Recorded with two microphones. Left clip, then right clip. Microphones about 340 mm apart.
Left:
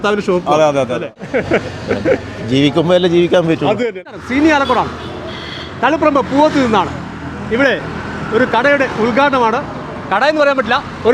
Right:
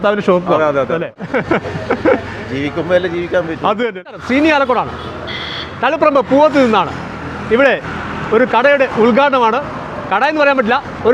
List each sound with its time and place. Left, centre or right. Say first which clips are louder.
0.0 s a man's voice: right 2 dB; centre
0.5 s a man's voice: left 5 dB; left
1.3 s vehicle: left 1 dB; right
2.5 s a man's voice: left 3 dB; left
3.7 s a man's voice: even; right
4.3 s speech: even; right
10.1 s a man's voice: even; right
11.1 s speech: even; centre